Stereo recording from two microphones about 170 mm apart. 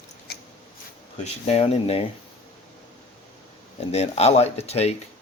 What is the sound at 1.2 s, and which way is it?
Speech, 35° left (ahead or behind).